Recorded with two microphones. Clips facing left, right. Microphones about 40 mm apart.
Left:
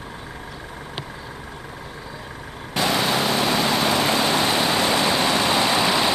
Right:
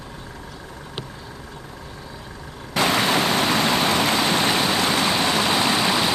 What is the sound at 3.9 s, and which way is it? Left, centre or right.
Vehicle, centre.